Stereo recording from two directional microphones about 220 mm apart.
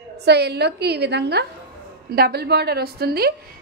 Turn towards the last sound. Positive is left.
turn(degrees=-45)  # may be behind; listen again after turning